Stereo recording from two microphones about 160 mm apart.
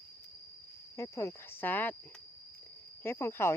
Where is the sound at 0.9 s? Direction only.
20° left (ahead or behind).